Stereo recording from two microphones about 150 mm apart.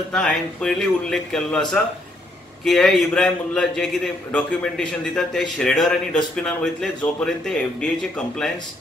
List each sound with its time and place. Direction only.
0.1 s a man's voice: 5° left (ahead or behind)